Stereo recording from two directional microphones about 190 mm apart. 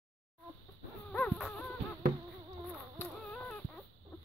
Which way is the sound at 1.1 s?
5° left (ahead or behind).